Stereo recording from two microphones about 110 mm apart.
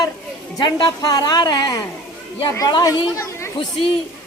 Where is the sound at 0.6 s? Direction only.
40° left (ahead or behind).